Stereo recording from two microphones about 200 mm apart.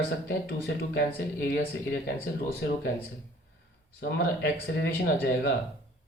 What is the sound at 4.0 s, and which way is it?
Speech, 55° left (ahead or behind).